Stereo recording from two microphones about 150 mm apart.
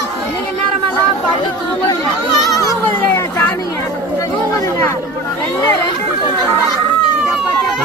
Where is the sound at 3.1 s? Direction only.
15° left (ahead or behind).